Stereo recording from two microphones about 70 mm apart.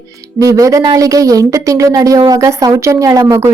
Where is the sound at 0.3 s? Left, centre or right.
Right.